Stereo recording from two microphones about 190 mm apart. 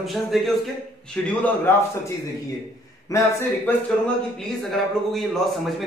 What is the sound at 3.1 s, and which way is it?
Speech, 15° left (ahead or behind).